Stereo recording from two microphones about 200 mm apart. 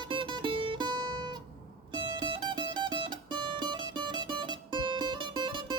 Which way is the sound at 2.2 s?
25° right (ahead or behind).